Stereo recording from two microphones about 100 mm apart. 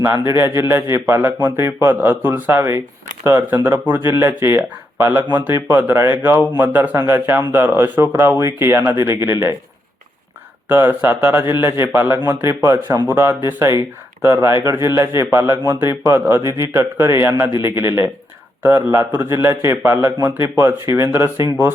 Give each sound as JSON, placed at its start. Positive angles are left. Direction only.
{"t": 0.4, "sound": "speech", "side_deg": -25}
{"t": 10.7, "sound": "speech", "side_deg": -20}